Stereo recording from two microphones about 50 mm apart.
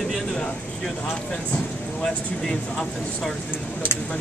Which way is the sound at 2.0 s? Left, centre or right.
Centre.